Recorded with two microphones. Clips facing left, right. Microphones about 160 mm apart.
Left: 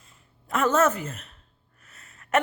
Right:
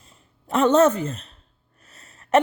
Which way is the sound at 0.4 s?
30° right (ahead or behind).